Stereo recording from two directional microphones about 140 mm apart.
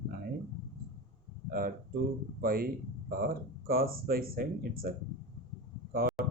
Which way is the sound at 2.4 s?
90° right.